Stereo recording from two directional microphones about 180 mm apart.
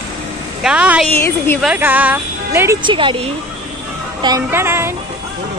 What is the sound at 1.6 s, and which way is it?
Speech, 5° right (ahead or behind).